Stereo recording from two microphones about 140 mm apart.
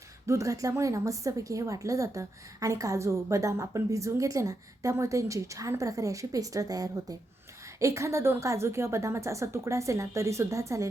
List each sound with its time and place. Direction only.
0.3 s a woman's voice: 20° right (ahead or behind)